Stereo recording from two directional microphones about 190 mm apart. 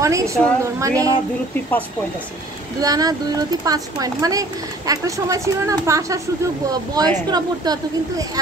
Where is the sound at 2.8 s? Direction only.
20° right (ahead or behind).